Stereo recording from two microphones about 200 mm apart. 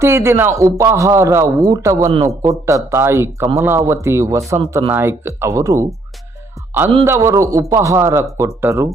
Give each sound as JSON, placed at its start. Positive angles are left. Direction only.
{"t": 0.0, "sound": "speech", "side_deg": -15}
{"t": 7.0, "sound": "speech", "side_deg": -15}